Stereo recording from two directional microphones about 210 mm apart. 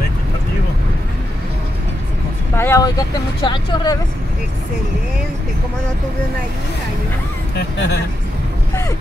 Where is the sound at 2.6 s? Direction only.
15° left (ahead or behind).